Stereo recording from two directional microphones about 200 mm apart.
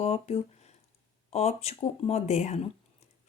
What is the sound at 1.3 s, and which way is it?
Speech, 30° left (ahead or behind).